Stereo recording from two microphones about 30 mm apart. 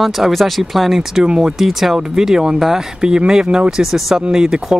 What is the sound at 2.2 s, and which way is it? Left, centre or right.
Speech, centre.